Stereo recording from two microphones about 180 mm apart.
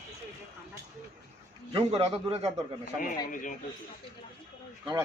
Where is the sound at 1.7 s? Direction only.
25° right (ahead or behind).